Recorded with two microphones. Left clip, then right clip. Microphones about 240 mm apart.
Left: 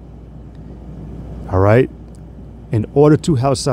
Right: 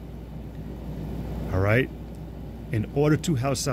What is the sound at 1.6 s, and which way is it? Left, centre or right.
Speech, left.